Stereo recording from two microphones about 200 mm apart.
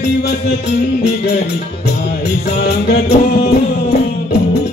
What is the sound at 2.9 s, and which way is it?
Music, 55° left (ahead or behind).